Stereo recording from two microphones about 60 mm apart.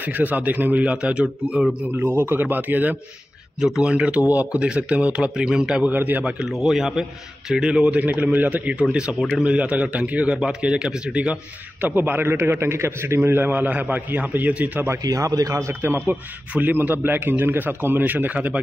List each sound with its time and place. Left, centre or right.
0.0 s a man's voice: right
2.0 s a man's voice: right
3.8 s a man's voice: centre
5.9 s a man's voice: right
6.5 s a man's voice: centre
11.8 s a man's voice: right
15.0 s a man's voice: right
15.8 s a man's voice: right